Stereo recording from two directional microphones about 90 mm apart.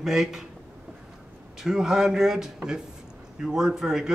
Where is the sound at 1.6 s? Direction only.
5° right (ahead or behind).